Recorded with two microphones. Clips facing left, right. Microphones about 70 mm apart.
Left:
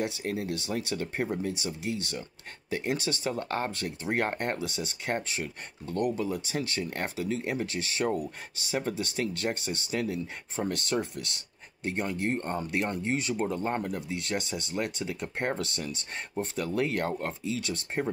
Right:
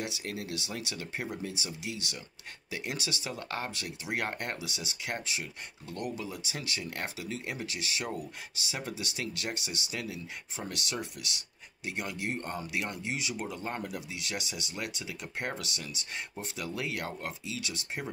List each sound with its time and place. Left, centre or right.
0.0 s speech: left